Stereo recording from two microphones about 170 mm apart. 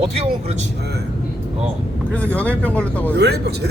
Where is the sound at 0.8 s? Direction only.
75° right (ahead or behind).